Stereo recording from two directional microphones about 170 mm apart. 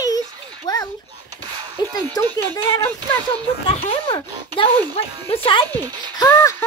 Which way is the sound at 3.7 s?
30° left (ahead or behind).